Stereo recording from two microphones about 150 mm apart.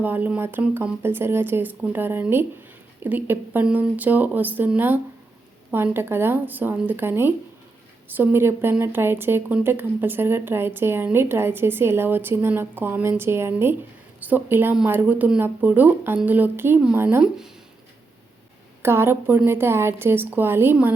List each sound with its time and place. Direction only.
0.0 s speech: 10° right (ahead or behind)
18.8 s speech: 15° right (ahead or behind)